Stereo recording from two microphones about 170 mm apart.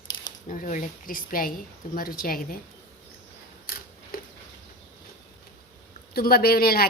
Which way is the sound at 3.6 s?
60° left (ahead or behind).